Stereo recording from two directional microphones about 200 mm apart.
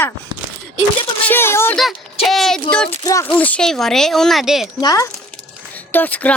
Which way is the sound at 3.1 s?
20° left (ahead or behind).